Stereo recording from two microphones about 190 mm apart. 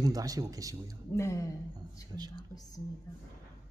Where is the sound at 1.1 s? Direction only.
15° left (ahead or behind).